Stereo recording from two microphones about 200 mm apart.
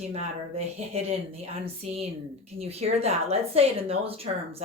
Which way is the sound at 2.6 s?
30° right (ahead or behind).